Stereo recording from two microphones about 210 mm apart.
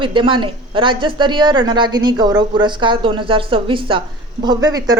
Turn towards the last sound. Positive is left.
turn(degrees=-20)  # may be behind; listen again after turning